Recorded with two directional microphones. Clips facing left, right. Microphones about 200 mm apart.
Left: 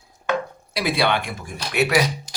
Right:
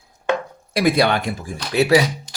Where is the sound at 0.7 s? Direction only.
50° right (ahead or behind); by 1.9 s 35° right (ahead or behind).